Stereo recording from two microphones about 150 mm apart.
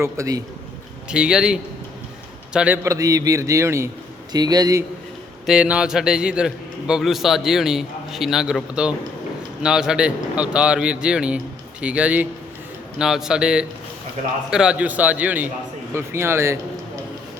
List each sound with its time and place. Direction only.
0.0 s a man's voice: 20° right (ahead or behind)
1.0 s a man's voice: 5° right (ahead or behind); by 4.8 s 25° right (ahead or behind)
5.5 s a man's voice: 5° right (ahead or behind)